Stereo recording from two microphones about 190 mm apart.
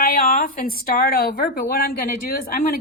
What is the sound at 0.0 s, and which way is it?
A woman's voice, 50° left (ahead or behind).